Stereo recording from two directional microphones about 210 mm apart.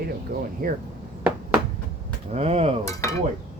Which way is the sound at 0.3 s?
45° right (ahead or behind).